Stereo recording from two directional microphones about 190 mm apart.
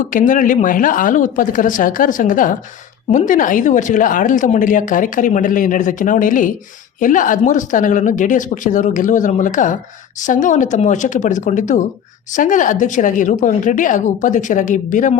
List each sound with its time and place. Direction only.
0.0 s a woman's voice: 45° left (ahead or behind)